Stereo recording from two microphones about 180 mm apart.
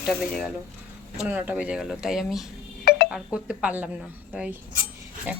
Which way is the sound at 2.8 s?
60° left (ahead or behind).